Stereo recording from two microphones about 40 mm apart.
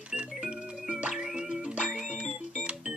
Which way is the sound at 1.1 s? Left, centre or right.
Right.